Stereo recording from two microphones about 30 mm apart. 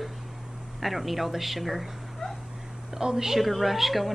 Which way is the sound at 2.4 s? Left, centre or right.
Right.